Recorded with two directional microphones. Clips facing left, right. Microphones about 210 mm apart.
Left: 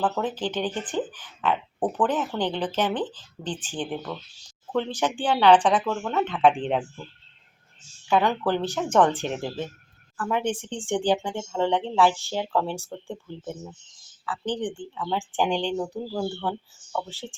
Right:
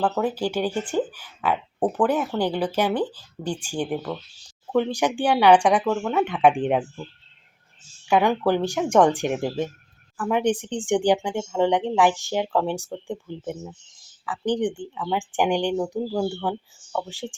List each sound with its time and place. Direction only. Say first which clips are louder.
0.0 s speech: right 3 dB; 10° right (ahead or behind)
8.0 s speech: right 3 dB; 10° right (ahead or behind)